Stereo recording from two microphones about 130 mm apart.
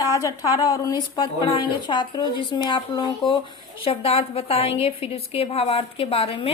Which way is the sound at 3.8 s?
45° left (ahead or behind).